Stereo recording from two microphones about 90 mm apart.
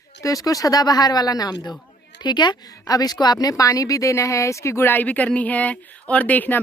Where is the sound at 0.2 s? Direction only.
40° left (ahead or behind).